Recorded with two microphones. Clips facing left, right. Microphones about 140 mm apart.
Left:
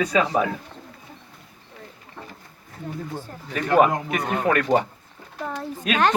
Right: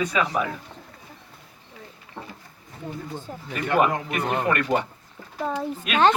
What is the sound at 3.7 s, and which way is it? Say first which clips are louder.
Speech: left 3 dB; 40° left (ahead or behind).